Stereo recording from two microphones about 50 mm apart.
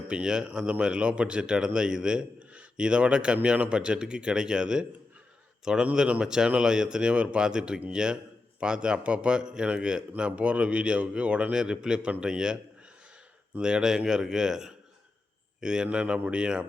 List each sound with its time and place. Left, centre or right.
0.1 s speech: centre
13.6 s speech: centre